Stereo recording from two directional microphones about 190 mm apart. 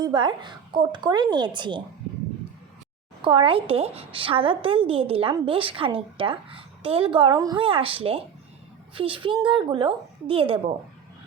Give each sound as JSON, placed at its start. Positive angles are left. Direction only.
{"t": 0.0, "sound": "a woman's voice", "side_deg": -25}
{"t": 3.2, "sound": "a woman's voice", "side_deg": -30}